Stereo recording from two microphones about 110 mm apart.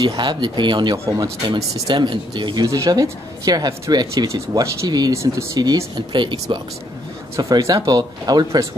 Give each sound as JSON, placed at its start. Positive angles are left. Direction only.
{"t": 0.2, "sound": "speech", "side_deg": -45}
{"t": 0.9, "sound": "speech", "side_deg": -25}
{"t": 1.7, "sound": "speech", "side_deg": -40}
{"t": 5.1, "sound": "speech", "side_deg": -30}
{"t": 7.3, "sound": "speech", "side_deg": -30}